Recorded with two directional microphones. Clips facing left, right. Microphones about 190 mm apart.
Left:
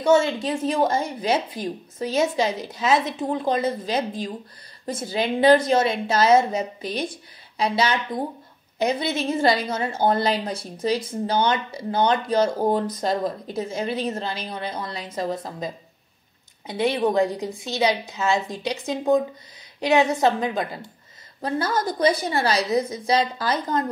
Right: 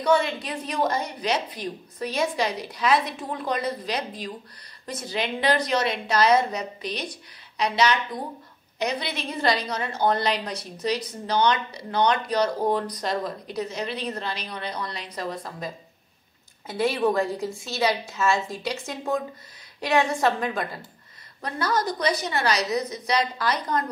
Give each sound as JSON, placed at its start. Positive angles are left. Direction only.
{"t": 0.0, "sound": "a woman's voice", "side_deg": 25}